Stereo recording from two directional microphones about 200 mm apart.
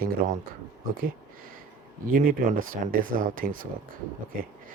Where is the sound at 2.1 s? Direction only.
45° right (ahead or behind).